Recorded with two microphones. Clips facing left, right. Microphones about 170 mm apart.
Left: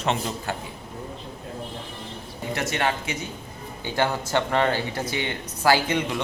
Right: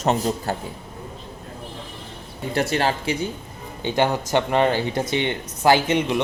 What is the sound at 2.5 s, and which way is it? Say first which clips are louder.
Speech: right 4 dB; 35° right (ahead or behind).